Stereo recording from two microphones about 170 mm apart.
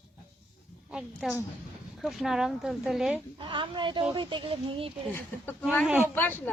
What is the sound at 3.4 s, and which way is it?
Speech, 30° right (ahead or behind).